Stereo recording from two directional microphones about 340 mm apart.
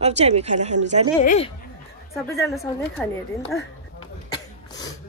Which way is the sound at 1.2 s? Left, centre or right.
Centre.